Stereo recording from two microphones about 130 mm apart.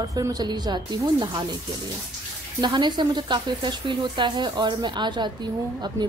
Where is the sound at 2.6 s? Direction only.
35° right (ahead or behind).